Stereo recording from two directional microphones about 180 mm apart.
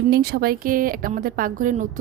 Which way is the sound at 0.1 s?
60° right (ahead or behind).